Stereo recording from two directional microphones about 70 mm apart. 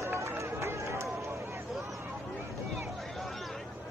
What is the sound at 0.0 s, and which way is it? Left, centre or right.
Run, right.